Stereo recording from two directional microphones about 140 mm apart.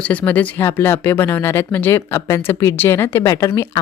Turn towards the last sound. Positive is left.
turn(degrees=25)  # may be behind; listen again after turning